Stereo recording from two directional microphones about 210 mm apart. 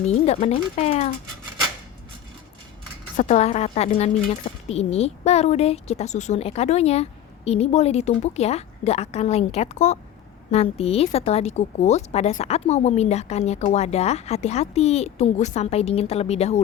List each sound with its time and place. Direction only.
0.0 s a woman's voice: 30° left (ahead or behind)
3.2 s a woman's voice: 30° left (ahead or behind)